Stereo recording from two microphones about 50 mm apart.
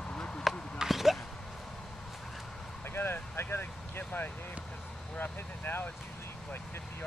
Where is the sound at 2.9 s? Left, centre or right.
Left.